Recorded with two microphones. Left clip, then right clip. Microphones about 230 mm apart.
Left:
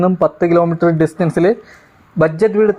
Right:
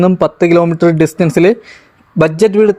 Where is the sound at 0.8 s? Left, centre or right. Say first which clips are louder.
Right 3 dB; right.